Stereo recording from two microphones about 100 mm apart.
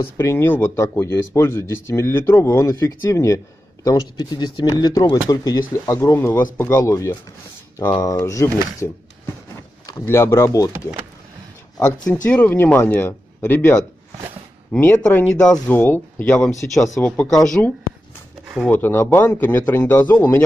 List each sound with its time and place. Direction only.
0.0 s speech: 25° left (ahead or behind)
3.8 s speech: 40° left (ahead or behind)
9.9 s speech: 25° left (ahead or behind)
12.1 s speech: 20° left (ahead or behind)
14.8 s speech: 15° left (ahead or behind)
18.7 s speech: 20° left (ahead or behind)